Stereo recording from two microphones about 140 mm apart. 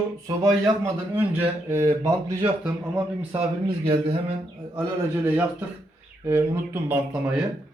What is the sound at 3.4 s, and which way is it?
Speech, 40° right (ahead or behind).